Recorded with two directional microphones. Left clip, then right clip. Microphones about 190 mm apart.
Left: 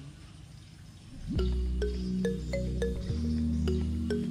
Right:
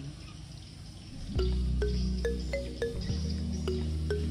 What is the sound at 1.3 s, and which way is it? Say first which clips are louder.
Music: even; 30° right (ahead or behind).